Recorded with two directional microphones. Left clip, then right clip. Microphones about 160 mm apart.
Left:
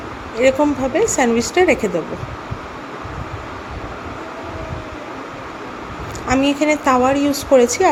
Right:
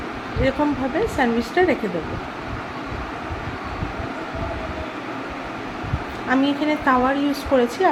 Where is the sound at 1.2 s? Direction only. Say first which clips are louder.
Left 2 dB; 45° left (ahead or behind).